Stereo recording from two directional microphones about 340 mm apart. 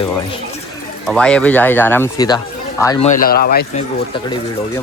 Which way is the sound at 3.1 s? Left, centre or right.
Left.